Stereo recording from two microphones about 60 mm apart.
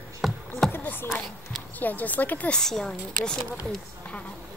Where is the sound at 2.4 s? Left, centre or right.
Centre.